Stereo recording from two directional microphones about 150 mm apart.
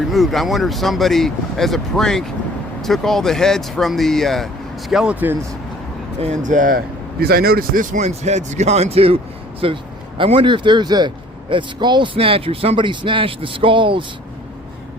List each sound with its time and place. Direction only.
0.1 s speech: centre (ahead or behind)
6.1 s speech: 50° right (ahead or behind)